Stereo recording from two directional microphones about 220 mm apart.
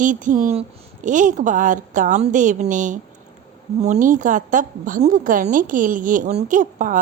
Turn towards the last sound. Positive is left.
turn(degrees=-35)  # may be behind; listen again after turning